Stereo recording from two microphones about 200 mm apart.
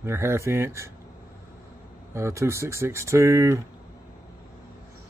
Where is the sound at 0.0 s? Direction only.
15° right (ahead or behind).